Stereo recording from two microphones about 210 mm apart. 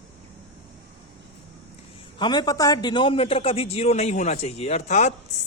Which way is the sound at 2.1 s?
20° left (ahead or behind).